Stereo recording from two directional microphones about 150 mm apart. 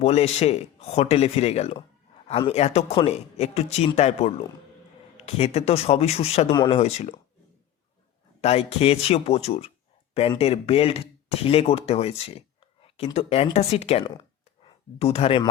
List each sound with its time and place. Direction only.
0.0 s a man's voice: 45° left (ahead or behind)
6.5 s speech: 30° left (ahead or behind)
6.7 s a man's voice: 45° left (ahead or behind)
8.4 s a man's voice: 45° left (ahead or behind)
14.0 s a sound: 35° left (ahead or behind)